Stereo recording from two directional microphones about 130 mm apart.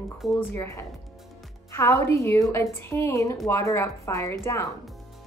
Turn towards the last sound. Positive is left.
turn(degrees=20)  # may be behind; listen again after turning